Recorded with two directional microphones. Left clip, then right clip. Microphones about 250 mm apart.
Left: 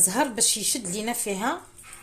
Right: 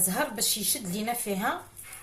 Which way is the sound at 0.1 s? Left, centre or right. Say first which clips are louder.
Left 4 dB; left.